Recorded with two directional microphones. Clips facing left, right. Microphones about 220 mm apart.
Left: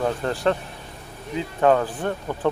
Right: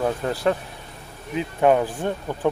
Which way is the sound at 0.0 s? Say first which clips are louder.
Even; 10° right (ahead or behind).